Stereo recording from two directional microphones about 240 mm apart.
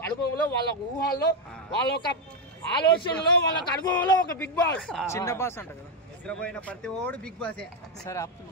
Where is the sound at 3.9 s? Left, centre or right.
Centre.